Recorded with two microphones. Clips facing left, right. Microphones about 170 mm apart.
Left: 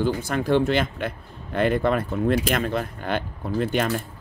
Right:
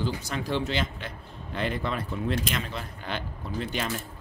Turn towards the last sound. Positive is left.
turn(degrees=55)  # may be behind; listen again after turning